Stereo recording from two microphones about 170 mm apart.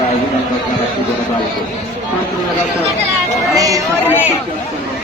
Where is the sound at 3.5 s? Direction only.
20° right (ahead or behind).